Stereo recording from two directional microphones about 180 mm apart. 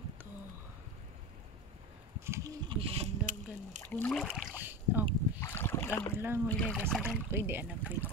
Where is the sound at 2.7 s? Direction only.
30° right (ahead or behind).